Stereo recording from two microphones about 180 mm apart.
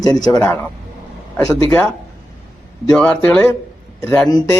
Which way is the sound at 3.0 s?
5° left (ahead or behind).